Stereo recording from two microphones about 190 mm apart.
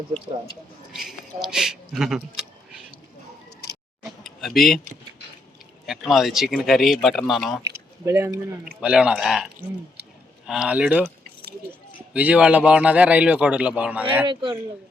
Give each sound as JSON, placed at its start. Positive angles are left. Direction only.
{"t": 0.9, "sound": "speech", "side_deg": 0}
{"t": 4.2, "sound": "a sound", "side_deg": 0}
{"t": 5.8, "sound": "speech", "side_deg": 0}
{"t": 7.6, "sound": "a man's voice", "side_deg": -15}
{"t": 12.1, "sound": "a man's voice", "side_deg": -5}
{"t": 14.3, "sound": "speech", "side_deg": -25}